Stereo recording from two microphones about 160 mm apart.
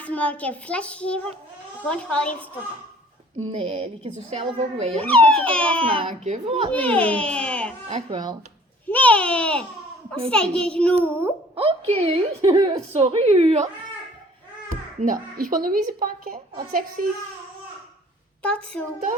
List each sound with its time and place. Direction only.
0.0 s a child's voice: 10° left (ahead or behind)
3.3 s a woman's voice: 35° right (ahead or behind)
5.0 s a child's voice: 5° left (ahead or behind)
5.8 s a woman's voice: 35° right (ahead or behind)
6.1 s a woman's voice: 50° right (ahead or behind)
6.7 s a child's voice: 10° left (ahead or behind)
7.9 s a child's voice: 30° right (ahead or behind)
8.9 s a child's voice: 10° left (ahead or behind)
11.5 s a woman's voice: 40° right (ahead or behind)
14.7 s a child's voice: 55° right (ahead or behind)
18.4 s a child's voice: 5° left (ahead or behind)